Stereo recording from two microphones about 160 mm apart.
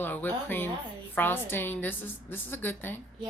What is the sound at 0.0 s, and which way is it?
A woman's voice, 10° left (ahead or behind).